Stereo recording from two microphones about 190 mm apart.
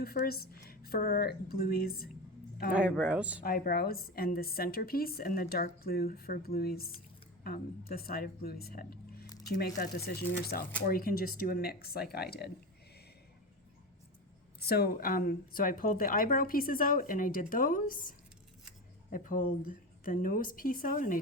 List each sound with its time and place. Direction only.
0.0 s speech: 55° left (ahead or behind)
2.7 s a woman's voice: 5° right (ahead or behind)
3.4 s speech: 50° left (ahead or behind)
14.6 s speech: 55° left (ahead or behind)
19.1 s speech: 45° left (ahead or behind)